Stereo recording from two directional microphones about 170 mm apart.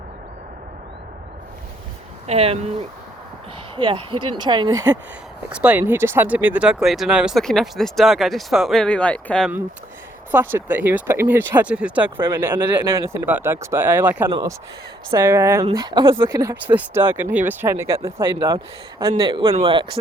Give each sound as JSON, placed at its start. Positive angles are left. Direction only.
{"t": 2.2, "sound": "speech", "side_deg": -40}
{"t": 3.8, "sound": "speech", "side_deg": -30}
{"t": 5.5, "sound": "speech", "side_deg": -10}
{"t": 10.3, "sound": "speech", "side_deg": -10}
{"t": 15.6, "sound": "speech", "side_deg": -25}
{"t": 18.2, "sound": "speech", "side_deg": -25}
{"t": 19.2, "sound": "speech", "side_deg": -30}